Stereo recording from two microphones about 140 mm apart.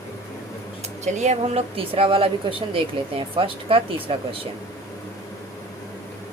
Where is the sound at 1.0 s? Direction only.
55° right (ahead or behind); by 4.1 s 40° right (ahead or behind).